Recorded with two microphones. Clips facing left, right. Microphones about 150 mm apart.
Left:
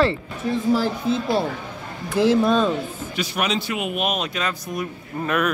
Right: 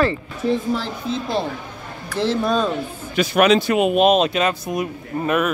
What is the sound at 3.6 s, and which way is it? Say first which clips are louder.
Speech: right 10 dB; 35° right (ahead or behind).